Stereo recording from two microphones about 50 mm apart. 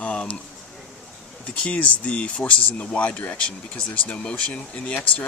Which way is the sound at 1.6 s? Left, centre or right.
Left.